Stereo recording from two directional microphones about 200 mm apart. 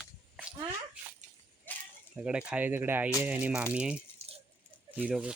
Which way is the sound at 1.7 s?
10° left (ahead or behind).